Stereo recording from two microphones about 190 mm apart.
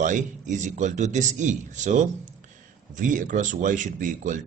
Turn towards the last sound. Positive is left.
turn(degrees=-40)  # may be behind; listen again after turning